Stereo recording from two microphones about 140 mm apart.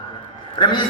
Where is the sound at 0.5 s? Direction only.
35° left (ahead or behind).